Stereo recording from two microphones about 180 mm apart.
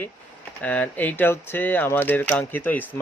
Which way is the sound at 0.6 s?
10° left (ahead or behind).